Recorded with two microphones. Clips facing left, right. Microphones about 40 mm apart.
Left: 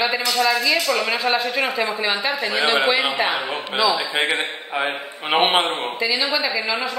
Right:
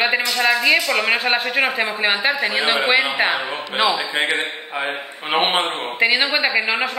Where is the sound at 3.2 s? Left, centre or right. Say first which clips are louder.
Right 2 dB; right.